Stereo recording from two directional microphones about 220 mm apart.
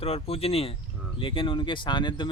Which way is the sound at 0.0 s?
25° left (ahead or behind).